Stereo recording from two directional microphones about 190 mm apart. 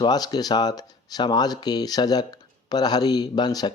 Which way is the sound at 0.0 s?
20° left (ahead or behind).